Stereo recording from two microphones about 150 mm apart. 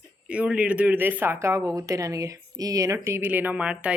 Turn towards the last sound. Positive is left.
turn(degrees=-10)  # may be behind; listen again after turning